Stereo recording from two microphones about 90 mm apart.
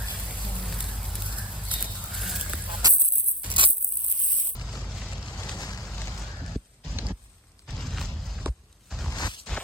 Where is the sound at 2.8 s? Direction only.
45° right (ahead or behind).